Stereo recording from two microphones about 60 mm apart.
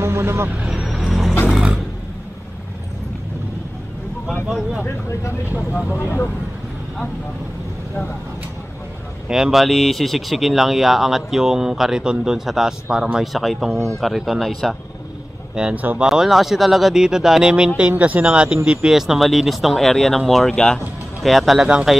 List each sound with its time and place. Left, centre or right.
0.0 s vehicle: right
0.6 s vehicle: centre
1.0 s a sound: centre
1.5 s vehicle: centre
4.5 s speech: centre
5.9 s speech: left
9.3 s speech: centre
13.3 s speech: centre
15.7 s speech: right
16.0 s speech: centre
18.9 s speech: centre
21.2 s speech: centre